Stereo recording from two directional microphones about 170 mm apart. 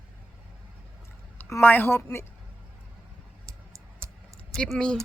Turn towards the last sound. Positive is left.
turn(degrees=5)  # may be behind; listen again after turning